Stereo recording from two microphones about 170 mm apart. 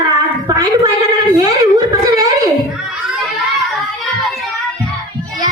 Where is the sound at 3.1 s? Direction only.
Centre (ahead or behind).